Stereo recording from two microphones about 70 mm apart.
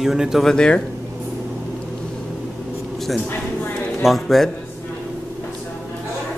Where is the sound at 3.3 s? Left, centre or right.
Left.